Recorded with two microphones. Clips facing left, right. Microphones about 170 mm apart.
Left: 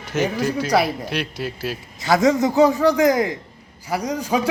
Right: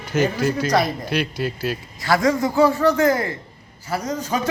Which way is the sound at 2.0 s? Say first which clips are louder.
Left 2 dB; 20° left (ahead or behind).